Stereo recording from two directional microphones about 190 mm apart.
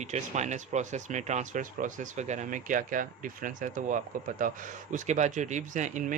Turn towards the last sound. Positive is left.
turn(degrees=-40)  # may be behind; listen again after turning